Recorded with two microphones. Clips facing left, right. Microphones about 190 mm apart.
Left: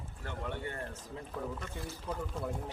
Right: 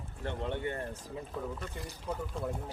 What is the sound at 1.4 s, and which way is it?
Speech, centre (ahead or behind).